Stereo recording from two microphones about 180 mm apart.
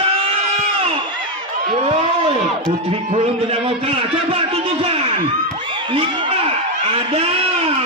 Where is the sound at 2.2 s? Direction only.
30° right (ahead or behind).